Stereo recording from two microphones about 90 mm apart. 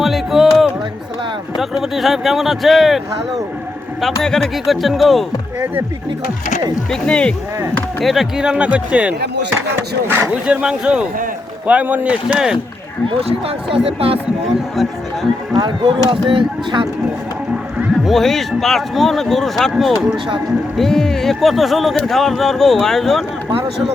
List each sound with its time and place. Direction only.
0.0 s music: centre (ahead or behind)
1.5 s speech: 5° right (ahead or behind)
4.2 s speech: 5° left (ahead or behind)
6.9 s speech: 10° left (ahead or behind)
8.0 s speech: centre (ahead or behind)
10.1 s speech: 25° right (ahead or behind)
10.3 s speech: 15° right (ahead or behind)
13.1 s speech: 90° right
15.5 s speech: 55° right (ahead or behind)
18.0 s speech: 5° left (ahead or behind)